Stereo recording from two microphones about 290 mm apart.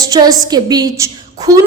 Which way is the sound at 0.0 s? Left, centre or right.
Centre.